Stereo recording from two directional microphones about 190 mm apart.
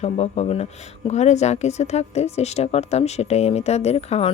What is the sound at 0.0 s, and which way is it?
Speech, 35° left (ahead or behind).